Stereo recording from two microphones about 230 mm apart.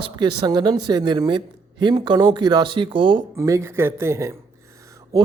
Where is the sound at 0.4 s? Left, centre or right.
Centre.